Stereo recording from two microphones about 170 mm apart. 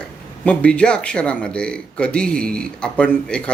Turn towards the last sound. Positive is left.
turn(degrees=5)  # may be behind; listen again after turning